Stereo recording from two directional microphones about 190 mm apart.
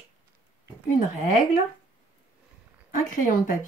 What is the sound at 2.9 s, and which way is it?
Speech, 45° left (ahead or behind).